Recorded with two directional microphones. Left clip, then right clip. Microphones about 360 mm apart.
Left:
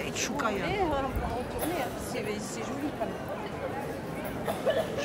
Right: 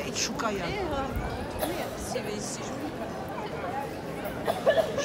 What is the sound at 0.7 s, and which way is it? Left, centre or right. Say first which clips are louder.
Speech: left 2 dB; left.